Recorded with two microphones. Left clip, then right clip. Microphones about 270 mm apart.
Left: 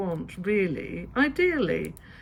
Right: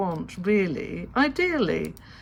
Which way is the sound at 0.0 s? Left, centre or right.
Centre.